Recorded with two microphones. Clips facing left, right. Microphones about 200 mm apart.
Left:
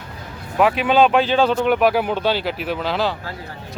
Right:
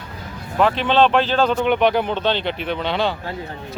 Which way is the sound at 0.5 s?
5° left (ahead or behind).